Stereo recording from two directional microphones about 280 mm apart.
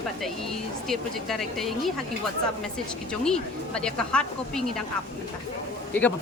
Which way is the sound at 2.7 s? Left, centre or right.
Centre.